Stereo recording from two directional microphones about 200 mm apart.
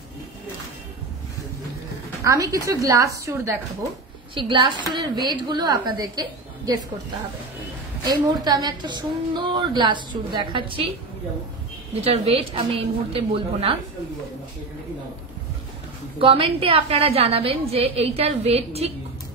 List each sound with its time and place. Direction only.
2.2 s a woman's voice: 15° right (ahead or behind)
8.0 s a woman's voice: 20° right (ahead or behind)
11.9 s a woman's voice: 30° right (ahead or behind)
16.2 s a woman's voice: 25° right (ahead or behind)